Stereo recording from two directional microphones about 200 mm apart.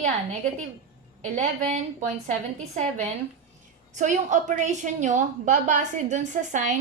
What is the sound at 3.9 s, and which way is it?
A woman's voice, 40° right (ahead or behind).